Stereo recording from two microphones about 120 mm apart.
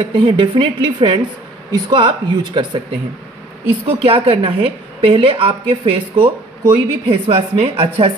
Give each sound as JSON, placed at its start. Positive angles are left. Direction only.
{"t": 0.1, "sound": "a woman's voice", "side_deg": -45}
{"t": 4.0, "sound": "a woman's voice", "side_deg": -55}